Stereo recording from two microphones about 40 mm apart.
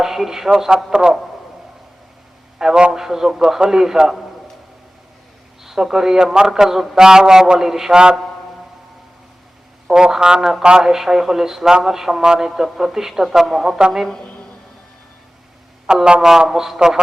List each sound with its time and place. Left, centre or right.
0.0 s speech: centre
2.6 s a man's voice: centre
5.6 s speech: centre
9.9 s speech: centre
15.9 s speech: centre